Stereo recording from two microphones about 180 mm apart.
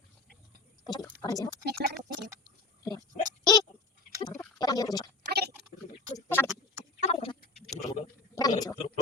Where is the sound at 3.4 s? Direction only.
20° left (ahead or behind).